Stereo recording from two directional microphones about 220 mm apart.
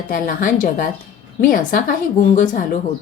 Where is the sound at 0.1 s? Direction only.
40° left (ahead or behind).